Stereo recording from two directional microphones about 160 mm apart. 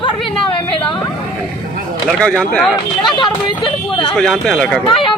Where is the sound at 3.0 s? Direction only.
30° left (ahead or behind).